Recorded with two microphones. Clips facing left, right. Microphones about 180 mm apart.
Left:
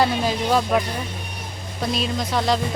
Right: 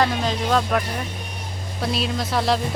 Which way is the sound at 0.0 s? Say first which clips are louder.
Left 1 dB; 5° left (ahead or behind).